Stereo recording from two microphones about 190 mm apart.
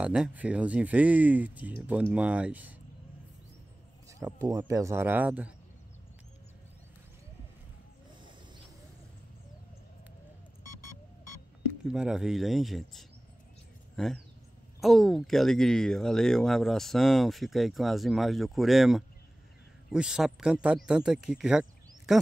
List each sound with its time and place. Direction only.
0.0 s speech: 5° right (ahead or behind)
4.1 s speech: 15° right (ahead or behind)
11.8 s speech: 5° right (ahead or behind)